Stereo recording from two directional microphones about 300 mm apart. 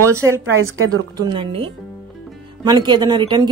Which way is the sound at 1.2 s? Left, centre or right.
Centre.